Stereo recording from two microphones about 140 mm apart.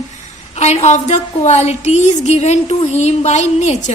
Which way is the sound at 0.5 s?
50° left (ahead or behind).